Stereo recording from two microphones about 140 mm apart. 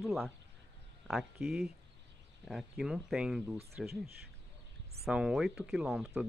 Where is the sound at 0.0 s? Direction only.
Centre (ahead or behind).